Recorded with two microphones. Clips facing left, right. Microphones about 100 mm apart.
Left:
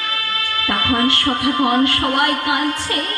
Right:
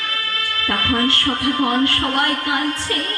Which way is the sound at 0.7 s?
15° left (ahead or behind).